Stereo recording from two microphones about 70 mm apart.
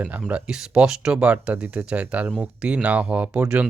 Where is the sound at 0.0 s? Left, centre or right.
Right.